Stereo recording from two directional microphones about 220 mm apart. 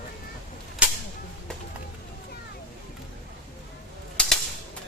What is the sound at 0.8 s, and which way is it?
Whip, 5° right (ahead or behind).